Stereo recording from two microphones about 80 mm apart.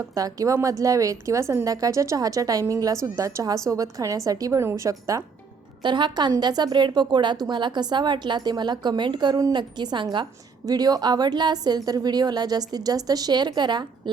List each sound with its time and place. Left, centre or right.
0.1 s a woman's voice: right
4.6 s speech: right
5.8 s a woman's voice: right
10.7 s a woman's voice: right